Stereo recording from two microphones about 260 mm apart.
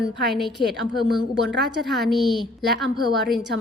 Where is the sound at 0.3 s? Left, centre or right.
Centre.